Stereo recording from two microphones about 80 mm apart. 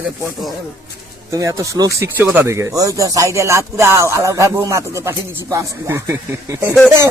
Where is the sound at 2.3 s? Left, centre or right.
Right.